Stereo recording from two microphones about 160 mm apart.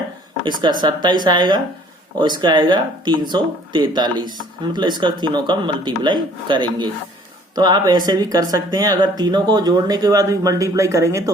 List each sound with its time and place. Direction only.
0.4 s speech: 30° right (ahead or behind)